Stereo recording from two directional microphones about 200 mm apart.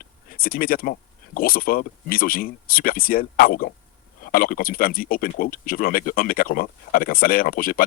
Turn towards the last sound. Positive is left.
turn(degrees=45)  # may be behind; listen again after turning